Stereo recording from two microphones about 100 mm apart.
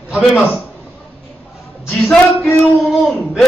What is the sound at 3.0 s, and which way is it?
Speech, centre (ahead or behind).